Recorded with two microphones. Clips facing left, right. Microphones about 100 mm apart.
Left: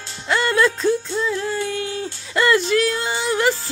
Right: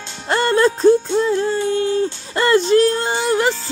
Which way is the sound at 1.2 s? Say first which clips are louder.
Right 5 dB; 35° right (ahead or behind).